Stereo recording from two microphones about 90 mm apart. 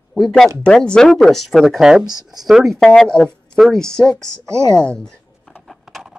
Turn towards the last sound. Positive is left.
turn(degrees=0)  # may be behind; listen again after turning